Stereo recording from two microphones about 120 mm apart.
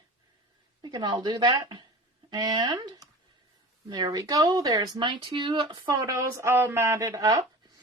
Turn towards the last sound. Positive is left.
turn(degrees=-30)  # may be behind; listen again after turning